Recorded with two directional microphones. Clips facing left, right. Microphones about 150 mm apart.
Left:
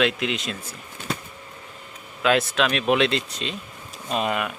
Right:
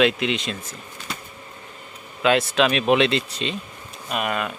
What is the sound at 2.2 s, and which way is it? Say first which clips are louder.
Speech: right 2 dB; centre (ahead or behind).